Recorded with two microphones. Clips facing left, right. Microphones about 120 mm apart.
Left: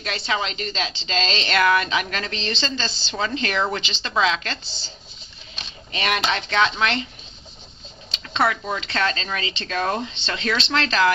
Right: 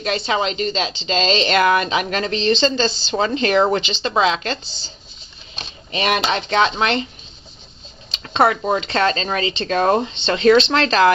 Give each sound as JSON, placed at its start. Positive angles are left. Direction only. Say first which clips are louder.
{"t": 0.0, "sound": "speech", "louder": "right 6 dB", "side_deg": -25}
{"t": 3.2, "sound": "speech", "louder": "right 7 dB", "side_deg": -30}
{"t": 5.9, "sound": "speech", "louder": "right 4 dB", "side_deg": -25}
{"t": 8.2, "sound": "speech", "louder": "right 6 dB", "side_deg": -30}